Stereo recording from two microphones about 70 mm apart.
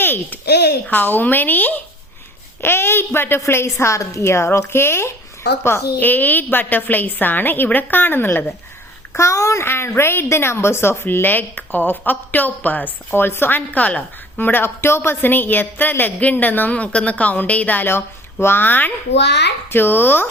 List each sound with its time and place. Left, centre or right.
0.0 s babbling: left
0.9 s a woman's voice: left
2.6 s a woman's voice: left
9.1 s a woman's voice: left